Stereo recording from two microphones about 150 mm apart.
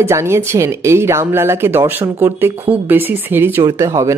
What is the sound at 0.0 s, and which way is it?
Speech, 15° right (ahead or behind).